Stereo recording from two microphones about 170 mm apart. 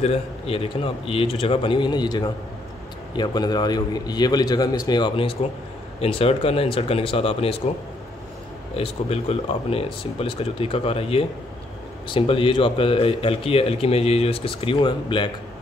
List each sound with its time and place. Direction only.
0.0 s a man's voice: 35° left (ahead or behind)
8.7 s a man's voice: 35° left (ahead or behind)